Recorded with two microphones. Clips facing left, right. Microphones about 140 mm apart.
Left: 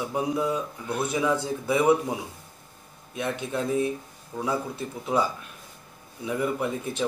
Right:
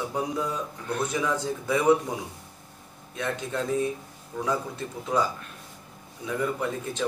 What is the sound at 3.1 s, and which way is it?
A man's voice, 15° left (ahead or behind).